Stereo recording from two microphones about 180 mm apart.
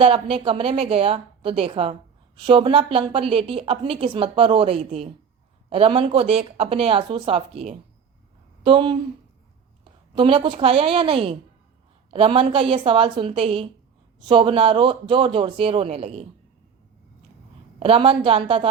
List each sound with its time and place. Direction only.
0.0 s a woman's voice: 30° right (ahead or behind)
17.7 s speech: 30° right (ahead or behind)